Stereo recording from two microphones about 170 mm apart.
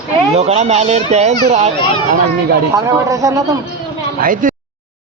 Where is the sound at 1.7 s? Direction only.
30° left (ahead or behind).